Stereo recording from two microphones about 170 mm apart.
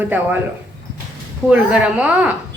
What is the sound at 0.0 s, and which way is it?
Speech, 10° right (ahead or behind).